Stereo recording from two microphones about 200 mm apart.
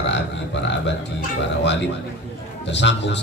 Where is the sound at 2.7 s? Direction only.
60° left (ahead or behind).